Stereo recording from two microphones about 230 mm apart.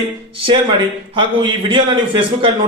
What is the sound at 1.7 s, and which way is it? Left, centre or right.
Speech, right.